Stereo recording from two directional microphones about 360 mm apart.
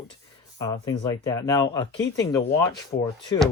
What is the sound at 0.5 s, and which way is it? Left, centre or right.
Speech, centre.